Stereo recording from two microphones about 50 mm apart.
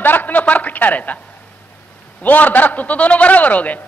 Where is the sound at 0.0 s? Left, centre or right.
Left.